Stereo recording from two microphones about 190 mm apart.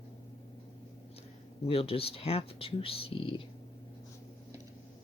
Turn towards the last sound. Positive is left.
turn(degrees=30)  # may be behind; listen again after turning